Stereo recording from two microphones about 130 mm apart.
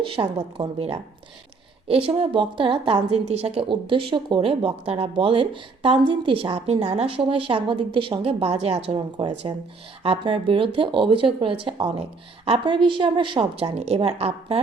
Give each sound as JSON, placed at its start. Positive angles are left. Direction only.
{"t": 0.0, "sound": "a woman's voice", "side_deg": -40}
{"t": 0.8, "sound": "a woman's voice", "side_deg": -50}